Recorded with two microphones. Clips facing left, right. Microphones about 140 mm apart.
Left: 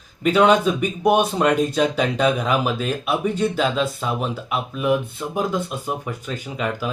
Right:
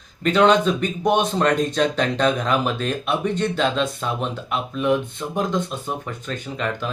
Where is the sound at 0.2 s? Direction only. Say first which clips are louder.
Left 1 dB; 10° left (ahead or behind).